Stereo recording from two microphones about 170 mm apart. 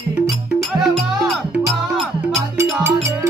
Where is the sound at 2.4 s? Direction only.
15° right (ahead or behind).